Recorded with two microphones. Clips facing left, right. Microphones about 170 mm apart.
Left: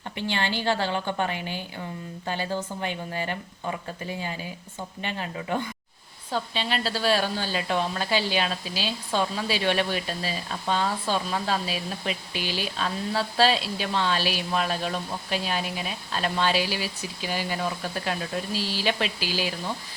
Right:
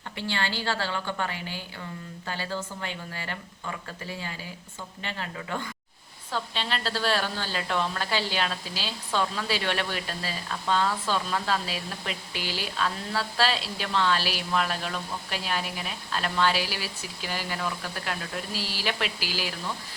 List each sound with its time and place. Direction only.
0.2 s a woman's voice: 20° left (ahead or behind)